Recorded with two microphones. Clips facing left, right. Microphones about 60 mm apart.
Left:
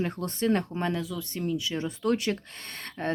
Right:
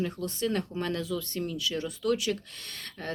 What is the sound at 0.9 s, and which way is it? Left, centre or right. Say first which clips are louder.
Speech: right 1 dB; centre.